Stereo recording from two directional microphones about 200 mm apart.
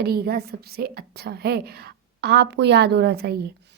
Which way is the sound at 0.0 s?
50° right (ahead or behind).